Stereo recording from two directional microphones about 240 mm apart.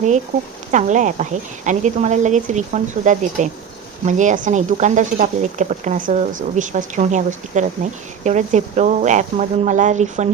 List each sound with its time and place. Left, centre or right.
0.7 s speech: right